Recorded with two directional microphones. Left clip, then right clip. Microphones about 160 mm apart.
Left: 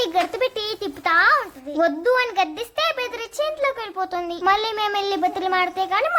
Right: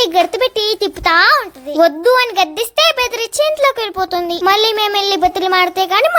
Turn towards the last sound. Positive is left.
turn(degrees=-35)  # may be behind; listen again after turning